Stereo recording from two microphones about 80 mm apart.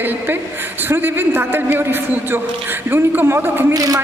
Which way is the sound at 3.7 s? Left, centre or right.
Right.